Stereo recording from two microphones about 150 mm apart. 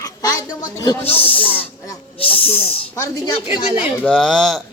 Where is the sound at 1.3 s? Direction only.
10° left (ahead or behind).